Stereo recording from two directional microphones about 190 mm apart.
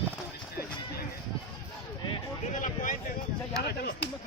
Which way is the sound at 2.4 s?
40° left (ahead or behind).